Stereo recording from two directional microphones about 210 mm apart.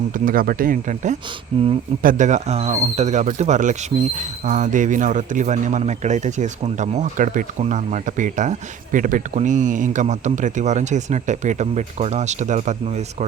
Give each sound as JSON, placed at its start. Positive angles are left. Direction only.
{"t": 0.1, "sound": "speech", "side_deg": -40}